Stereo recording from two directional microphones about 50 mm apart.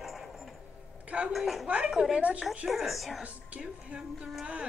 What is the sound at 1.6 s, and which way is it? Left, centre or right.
Speech, right.